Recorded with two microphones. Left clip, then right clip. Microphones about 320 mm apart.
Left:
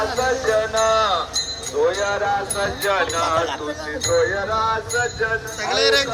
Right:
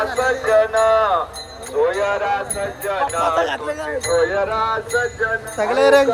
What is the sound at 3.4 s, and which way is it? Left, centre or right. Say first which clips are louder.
Speech: right 3 dB; right.